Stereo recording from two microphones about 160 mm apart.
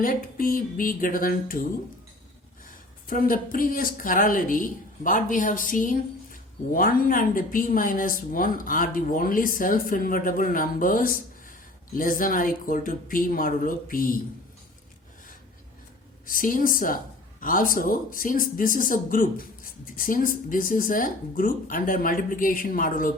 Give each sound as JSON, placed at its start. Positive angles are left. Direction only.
{"t": 0.0, "sound": "speech", "side_deg": 65}
{"t": 2.6, "sound": "speech", "side_deg": 60}
{"t": 16.2, "sound": "speech", "side_deg": 60}